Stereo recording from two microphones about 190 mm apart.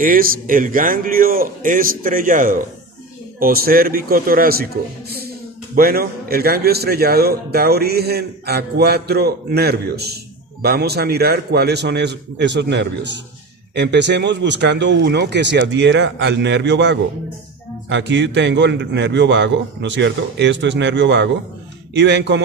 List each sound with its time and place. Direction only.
0.0 s a man's voice: 45° right (ahead or behind)
5.7 s a man's voice: 50° right (ahead or behind)